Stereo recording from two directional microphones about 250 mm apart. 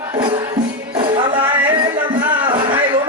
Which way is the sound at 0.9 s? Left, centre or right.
Centre.